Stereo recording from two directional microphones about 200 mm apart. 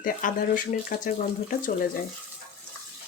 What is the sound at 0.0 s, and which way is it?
Speech, 45° left (ahead or behind).